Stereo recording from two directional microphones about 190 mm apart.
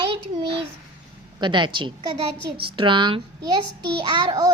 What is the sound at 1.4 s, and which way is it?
A child's voice, 25° right (ahead or behind).